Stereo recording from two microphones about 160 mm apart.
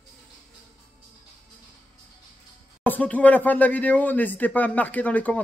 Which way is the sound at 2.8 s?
10° left (ahead or behind).